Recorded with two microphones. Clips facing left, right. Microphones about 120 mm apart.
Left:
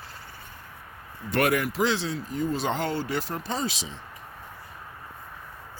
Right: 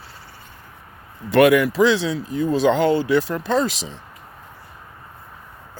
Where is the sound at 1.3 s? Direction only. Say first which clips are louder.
Right 10 dB; 90° right.